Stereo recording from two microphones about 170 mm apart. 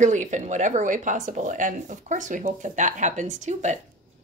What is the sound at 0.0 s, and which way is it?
Speech, 45° right (ahead or behind).